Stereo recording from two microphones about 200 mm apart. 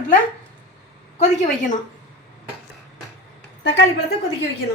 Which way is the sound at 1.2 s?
35° left (ahead or behind).